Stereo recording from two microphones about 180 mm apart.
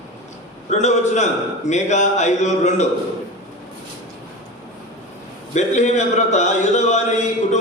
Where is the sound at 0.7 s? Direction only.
40° left (ahead or behind).